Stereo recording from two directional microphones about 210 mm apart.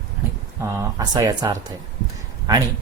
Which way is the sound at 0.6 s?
15° right (ahead or behind).